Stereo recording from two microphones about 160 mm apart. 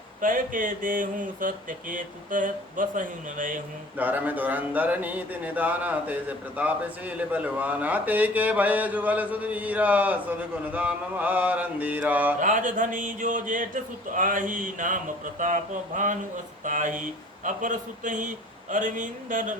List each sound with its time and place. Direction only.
0.2 s speech: 55° right (ahead or behind)
3.9 s speech: 10° right (ahead or behind)
12.4 s a man's voice: 55° right (ahead or behind)